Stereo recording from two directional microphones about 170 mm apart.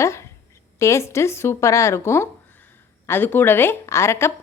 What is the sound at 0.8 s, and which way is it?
A woman's voice, 15° left (ahead or behind).